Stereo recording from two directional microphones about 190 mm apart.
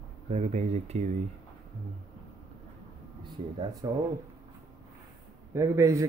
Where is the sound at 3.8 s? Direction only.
20° right (ahead or behind).